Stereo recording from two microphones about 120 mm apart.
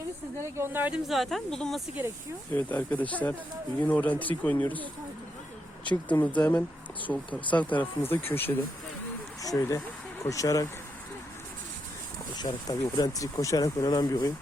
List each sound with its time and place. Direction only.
0.5 s speech: 20° right (ahead or behind)
1.0 s speech: centre (ahead or behind)
2.5 s speech: 15° left (ahead or behind)
6.1 s speech: 10° left (ahead or behind)
9.4 s speech: 30° left (ahead or behind)
12.4 s speech: 30° left (ahead or behind)